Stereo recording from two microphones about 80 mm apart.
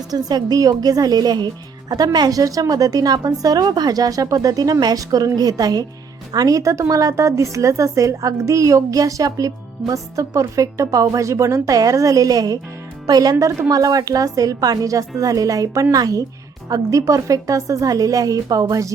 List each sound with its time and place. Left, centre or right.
0.1 s a woman's voice: right